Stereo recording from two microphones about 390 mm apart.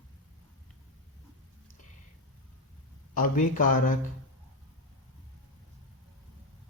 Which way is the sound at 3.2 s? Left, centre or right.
Left.